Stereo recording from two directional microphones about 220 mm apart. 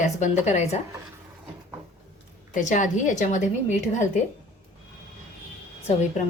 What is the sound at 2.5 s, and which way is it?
Speech, 35° left (ahead or behind).